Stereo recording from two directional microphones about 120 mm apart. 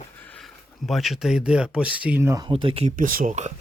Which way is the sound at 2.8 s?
80° right.